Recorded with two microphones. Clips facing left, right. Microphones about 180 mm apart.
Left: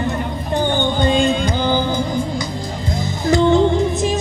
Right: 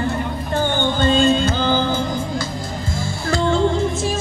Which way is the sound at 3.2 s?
20° left (ahead or behind).